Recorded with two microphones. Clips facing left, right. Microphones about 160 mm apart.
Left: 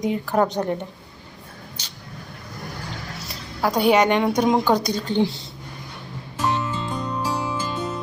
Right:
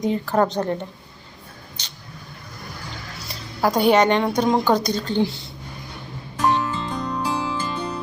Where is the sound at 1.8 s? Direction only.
10° left (ahead or behind).